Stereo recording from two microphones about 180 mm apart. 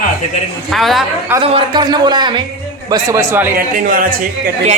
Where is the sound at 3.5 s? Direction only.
50° right (ahead or behind).